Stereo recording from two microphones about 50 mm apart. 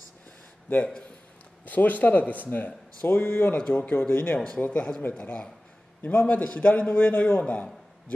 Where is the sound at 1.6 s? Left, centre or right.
Left.